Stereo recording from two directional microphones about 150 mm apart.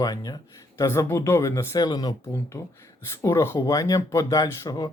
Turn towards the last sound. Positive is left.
turn(degrees=25)  # may be behind; listen again after turning